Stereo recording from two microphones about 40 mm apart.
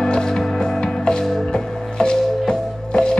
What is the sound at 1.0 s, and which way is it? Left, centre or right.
Music, left.